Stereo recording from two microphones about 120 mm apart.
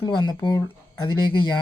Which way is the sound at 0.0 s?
40° left (ahead or behind).